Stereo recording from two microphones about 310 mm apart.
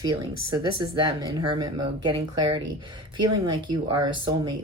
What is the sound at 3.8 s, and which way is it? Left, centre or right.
Speech, centre.